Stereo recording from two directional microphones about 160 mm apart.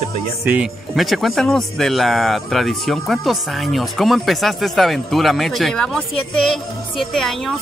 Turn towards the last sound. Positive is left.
turn(degrees=0)  # may be behind; listen again after turning